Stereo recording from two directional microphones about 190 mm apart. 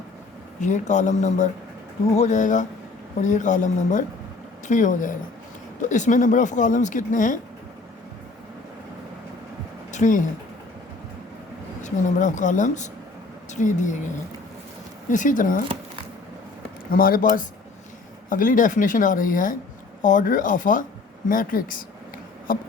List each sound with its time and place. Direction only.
0.6 s speech: 40° left (ahead or behind)
9.9 s speech: 40° left (ahead or behind)
11.8 s speech: 40° left (ahead or behind)
15.1 s speech: 40° left (ahead or behind)
16.9 s speech: 50° left (ahead or behind)